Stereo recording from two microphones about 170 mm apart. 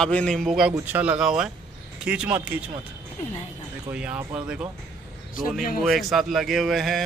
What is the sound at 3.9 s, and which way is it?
Speech, 10° right (ahead or behind).